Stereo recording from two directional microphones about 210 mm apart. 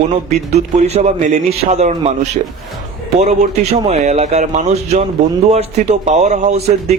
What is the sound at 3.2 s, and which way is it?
Speech, 35° right (ahead or behind).